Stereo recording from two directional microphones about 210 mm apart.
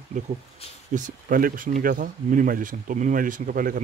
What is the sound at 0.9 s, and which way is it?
Speech, 40° right (ahead or behind).